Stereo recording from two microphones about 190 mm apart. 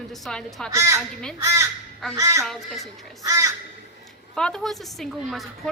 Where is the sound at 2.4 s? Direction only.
Centre (ahead or behind).